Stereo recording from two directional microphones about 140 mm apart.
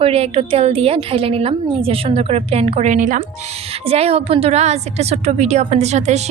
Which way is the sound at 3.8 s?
45° right (ahead or behind).